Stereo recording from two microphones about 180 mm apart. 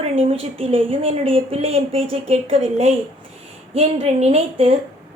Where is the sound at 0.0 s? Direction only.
35° right (ahead or behind).